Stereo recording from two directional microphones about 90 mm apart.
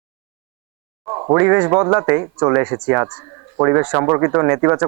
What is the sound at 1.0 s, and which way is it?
Speech, 30° right (ahead or behind).